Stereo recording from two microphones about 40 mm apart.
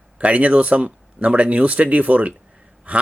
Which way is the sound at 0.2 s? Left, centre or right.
Right.